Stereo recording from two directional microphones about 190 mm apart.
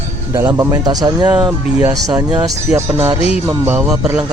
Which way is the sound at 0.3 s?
15° right (ahead or behind).